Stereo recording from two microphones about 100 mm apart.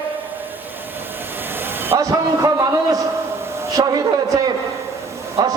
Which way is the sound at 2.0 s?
35° right (ahead or behind).